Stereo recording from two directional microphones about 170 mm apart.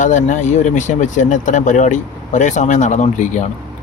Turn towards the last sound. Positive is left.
turn(degrees=45)  # may be behind; listen again after turning